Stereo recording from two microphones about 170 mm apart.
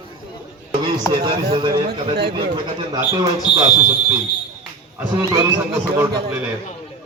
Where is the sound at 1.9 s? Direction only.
70° right (ahead or behind).